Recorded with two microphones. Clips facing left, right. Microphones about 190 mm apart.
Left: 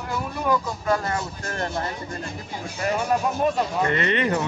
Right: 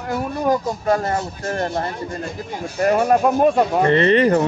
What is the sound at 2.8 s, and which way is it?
Speech, 55° right (ahead or behind).